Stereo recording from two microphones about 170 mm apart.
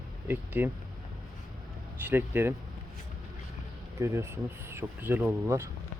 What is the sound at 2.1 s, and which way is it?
Speech, 10° right (ahead or behind).